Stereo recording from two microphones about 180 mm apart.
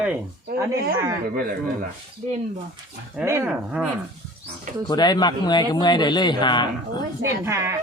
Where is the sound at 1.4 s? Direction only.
55° right (ahead or behind).